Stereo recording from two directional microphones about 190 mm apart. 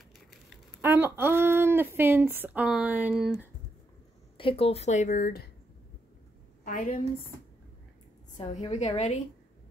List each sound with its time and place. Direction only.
0.5 s speech: 10° right (ahead or behind)
4.4 s speech: 30° left (ahead or behind); by 5.5 s 50° left (ahead or behind)
6.6 s a woman's voice: 45° left (ahead or behind)
8.5 s speech: 35° left (ahead or behind)